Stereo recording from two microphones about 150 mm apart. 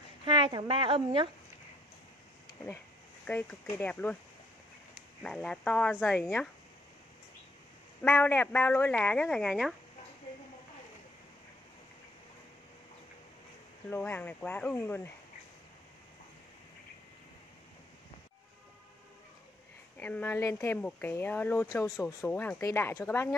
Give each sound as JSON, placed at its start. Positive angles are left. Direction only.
{"t": 0.2, "sound": "speech", "side_deg": -30}
{"t": 3.3, "sound": "speech", "side_deg": 10}
{"t": 5.2, "sound": "speech", "side_deg": 5}
{"t": 8.0, "sound": "speech", "side_deg": 10}
{"t": 13.8, "sound": "speech", "side_deg": 15}
{"t": 20.0, "sound": "speech", "side_deg": 10}